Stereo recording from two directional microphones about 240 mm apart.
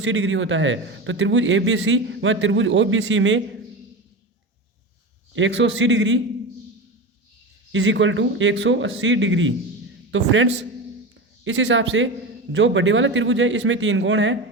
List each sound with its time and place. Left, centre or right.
0.0 s a man's voice: right
5.3 s a man's voice: right
7.7 s a man's voice: right